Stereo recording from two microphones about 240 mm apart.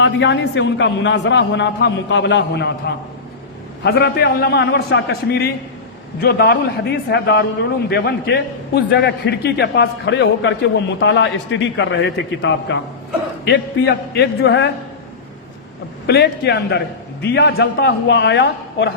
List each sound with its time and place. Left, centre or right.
0.0 s a man's voice: left
16.0 s a man's voice: left